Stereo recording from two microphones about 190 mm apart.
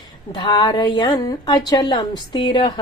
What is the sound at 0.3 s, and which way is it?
Speech, 20° left (ahead or behind).